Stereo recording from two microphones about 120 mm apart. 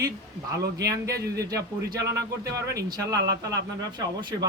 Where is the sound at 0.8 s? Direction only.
30° right (ahead or behind).